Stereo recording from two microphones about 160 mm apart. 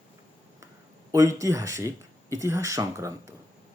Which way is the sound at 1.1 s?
20° right (ahead or behind).